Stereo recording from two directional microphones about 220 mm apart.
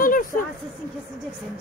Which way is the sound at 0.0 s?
40° left (ahead or behind).